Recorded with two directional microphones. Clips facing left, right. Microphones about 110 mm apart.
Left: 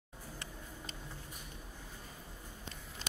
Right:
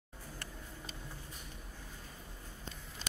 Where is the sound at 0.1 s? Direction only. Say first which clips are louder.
Left 1 dB; 10° left (ahead or behind).